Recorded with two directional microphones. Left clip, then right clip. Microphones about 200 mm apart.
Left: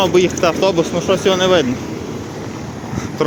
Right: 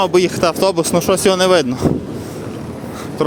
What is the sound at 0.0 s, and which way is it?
Speech, 35° right (ahead or behind).